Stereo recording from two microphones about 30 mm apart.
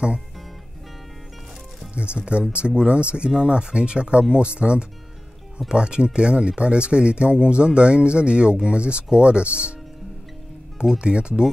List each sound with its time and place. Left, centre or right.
2.0 s speech: right
11.0 s speech: right